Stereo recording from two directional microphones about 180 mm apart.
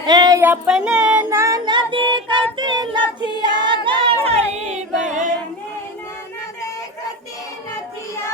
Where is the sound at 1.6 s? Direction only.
25° right (ahead or behind).